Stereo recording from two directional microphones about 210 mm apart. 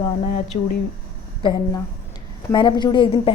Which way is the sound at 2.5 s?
20° left (ahead or behind).